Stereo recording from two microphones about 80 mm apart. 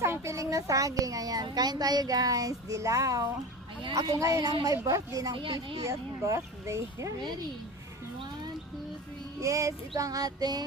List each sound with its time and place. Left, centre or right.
0.0 s a child's voice: right
1.5 s speech: right
5.3 s speech: right
5.8 s speech: right
9.4 s speech: right